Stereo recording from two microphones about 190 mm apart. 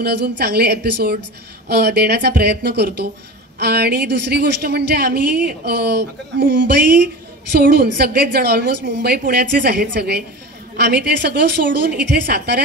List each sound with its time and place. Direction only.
0.0 s a woman's voice: 60° right (ahead or behind)